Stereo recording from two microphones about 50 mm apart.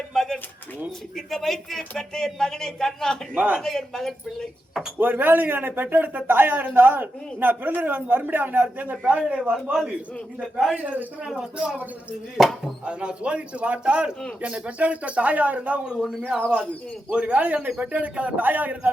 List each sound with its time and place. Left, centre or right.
0.1 s pigeon: centre
1.1 s a man's voice: centre
3.3 s a man's voice: right
3.6 s a man's voice: centre
4.9 s a man's voice: right
10.8 s a man's voice: right
11.5 s speech: right
12.4 s a man's voice: centre
12.8 s speech: right
17.1 s a man's voice: right